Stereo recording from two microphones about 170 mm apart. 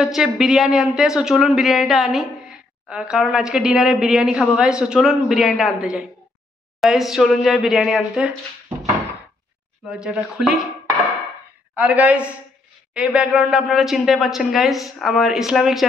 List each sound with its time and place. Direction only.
0.0 s a woman's voice: centre (ahead or behind)
9.8 s a woman's voice: 5° right (ahead or behind)